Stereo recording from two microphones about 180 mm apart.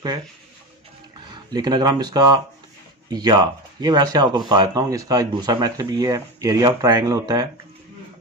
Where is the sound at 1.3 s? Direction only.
25° right (ahead or behind).